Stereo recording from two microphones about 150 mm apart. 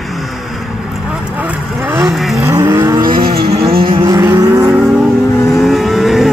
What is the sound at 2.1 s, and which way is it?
Vehicle, centre (ahead or behind).